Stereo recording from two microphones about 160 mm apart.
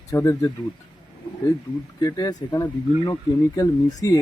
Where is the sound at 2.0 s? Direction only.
20° left (ahead or behind).